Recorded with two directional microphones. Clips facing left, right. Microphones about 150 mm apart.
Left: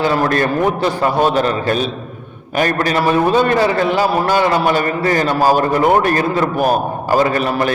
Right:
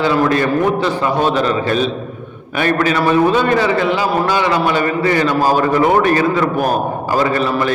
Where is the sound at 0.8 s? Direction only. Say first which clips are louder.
Left 1 dB; 10° left (ahead or behind).